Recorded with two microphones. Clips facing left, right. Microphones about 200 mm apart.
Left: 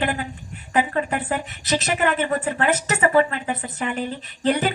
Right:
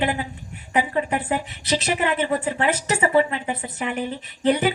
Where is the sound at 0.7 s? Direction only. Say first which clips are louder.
Left 1 dB; 15° right (ahead or behind).